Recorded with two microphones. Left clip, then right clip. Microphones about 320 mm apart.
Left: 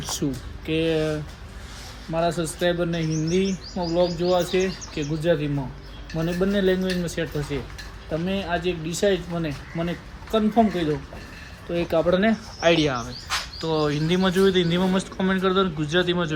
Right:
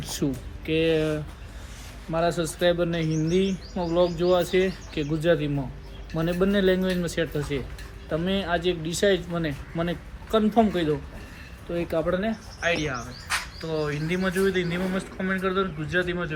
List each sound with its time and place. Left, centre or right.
0.3 s speech: centre
11.7 s speech: centre
12.5 s speech: centre